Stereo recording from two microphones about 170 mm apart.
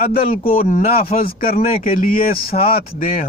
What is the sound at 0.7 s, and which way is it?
Speech, 50° left (ahead or behind).